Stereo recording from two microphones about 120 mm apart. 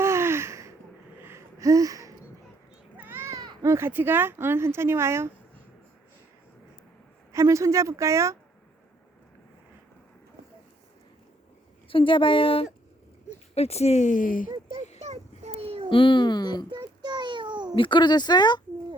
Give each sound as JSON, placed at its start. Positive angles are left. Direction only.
{"t": 0.0, "sound": "a sound", "side_deg": -20}
{"t": 3.0, "sound": "a sound", "side_deg": -20}
{"t": 3.3, "sound": "speech", "side_deg": -30}
{"t": 7.3, "sound": "speech", "side_deg": -25}
{"t": 11.9, "sound": "speech", "side_deg": 45}
{"t": 13.3, "sound": "speech", "side_deg": 60}
{"t": 14.9, "sound": "a sound", "side_deg": -70}
{"t": 15.9, "sound": "speech", "side_deg": 45}
{"t": 16.7, "sound": "child singing", "side_deg": -35}
{"t": 17.7, "sound": "speech", "side_deg": 40}